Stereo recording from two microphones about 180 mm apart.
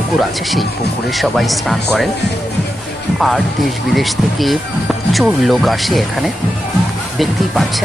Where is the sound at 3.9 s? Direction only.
Centre (ahead or behind).